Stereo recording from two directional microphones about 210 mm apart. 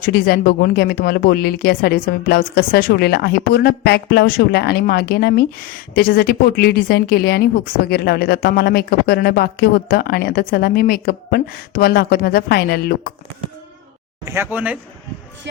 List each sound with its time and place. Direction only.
0.0 s speech: 50° left (ahead or behind)
14.3 s speech: 10° right (ahead or behind)